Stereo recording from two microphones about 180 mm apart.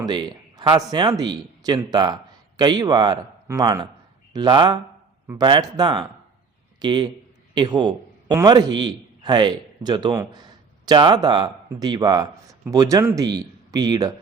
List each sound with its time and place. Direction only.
0.0 s a man's voice: 25° right (ahead or behind)